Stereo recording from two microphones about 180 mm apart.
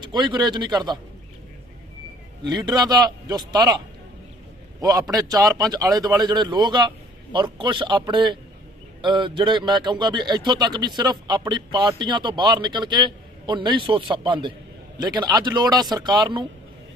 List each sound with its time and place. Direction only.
0.0 s a man's voice: 25° right (ahead or behind)
2.4 s a man's voice: 25° right (ahead or behind)